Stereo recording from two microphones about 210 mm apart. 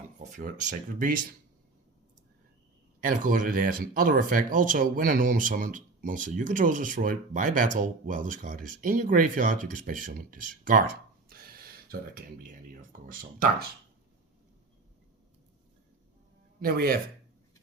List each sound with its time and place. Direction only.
0.2 s speech: 35° right (ahead or behind)
3.0 s speech: 40° right (ahead or behind)
16.6 s speech: 45° right (ahead or behind)